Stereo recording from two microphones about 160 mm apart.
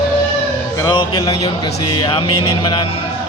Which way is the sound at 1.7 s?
30° left (ahead or behind).